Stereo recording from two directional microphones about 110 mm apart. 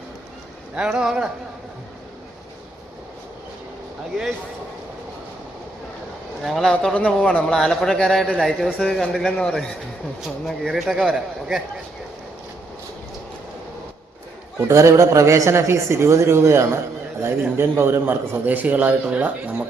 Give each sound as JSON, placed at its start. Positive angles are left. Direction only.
{"t": 0.8, "sound": "a man's voice", "side_deg": -5}
{"t": 6.4, "sound": "a man's voice", "side_deg": 0}
{"t": 14.6, "sound": "a man's voice", "side_deg": -25}